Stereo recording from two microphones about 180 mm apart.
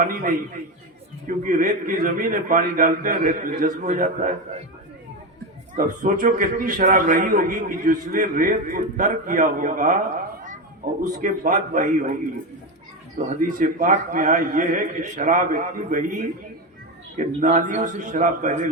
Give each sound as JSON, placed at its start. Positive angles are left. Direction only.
{"t": 0.0, "sound": "a man's voice", "side_deg": -50}
{"t": 5.7, "sound": "a man's voice", "side_deg": -45}
{"t": 11.0, "sound": "a man's voice", "side_deg": -45}
{"t": 13.1, "sound": "a man's voice", "side_deg": -45}